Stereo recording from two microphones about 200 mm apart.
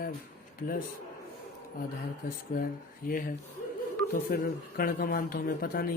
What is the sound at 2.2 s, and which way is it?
A man's voice, 45° left (ahead or behind).